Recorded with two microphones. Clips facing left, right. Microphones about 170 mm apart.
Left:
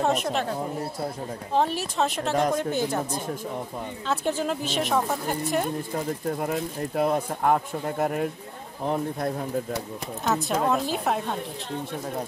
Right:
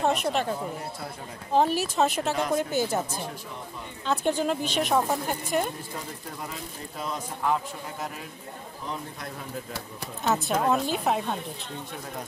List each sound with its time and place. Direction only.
0.0 s a woman's voice: centre (ahead or behind)
1.5 s a woman's voice: 5° right (ahead or behind)
6.3 s speech: 55° left (ahead or behind)
10.2 s a woman's voice: centre (ahead or behind)